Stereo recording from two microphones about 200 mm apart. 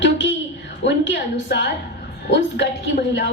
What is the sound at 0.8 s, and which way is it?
A woman's voice, 65° left (ahead or behind).